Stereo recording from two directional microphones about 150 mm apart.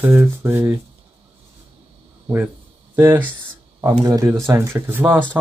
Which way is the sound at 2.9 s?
10° right (ahead or behind).